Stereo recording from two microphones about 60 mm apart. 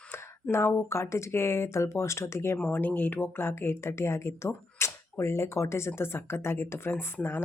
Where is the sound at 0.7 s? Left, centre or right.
Left.